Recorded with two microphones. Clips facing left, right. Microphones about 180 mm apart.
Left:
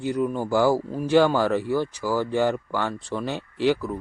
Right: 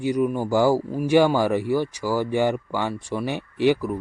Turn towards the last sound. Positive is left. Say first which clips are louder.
# right 2 dB
turn(degrees=-15)  # may be behind; listen again after turning